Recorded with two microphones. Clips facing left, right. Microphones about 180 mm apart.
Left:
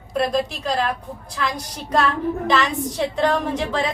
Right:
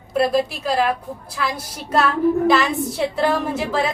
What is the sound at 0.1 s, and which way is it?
A woman's voice, 5° right (ahead or behind).